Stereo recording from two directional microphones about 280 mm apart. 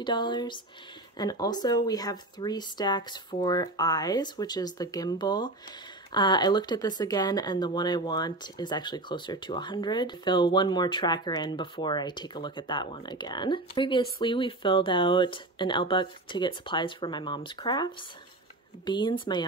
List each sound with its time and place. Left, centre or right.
0.0 s speech: centre